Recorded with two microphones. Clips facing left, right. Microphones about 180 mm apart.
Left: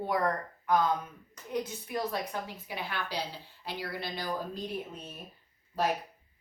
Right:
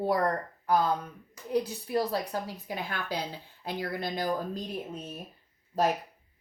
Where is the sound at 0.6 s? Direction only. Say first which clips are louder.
Right 1 dB; 35° right (ahead or behind).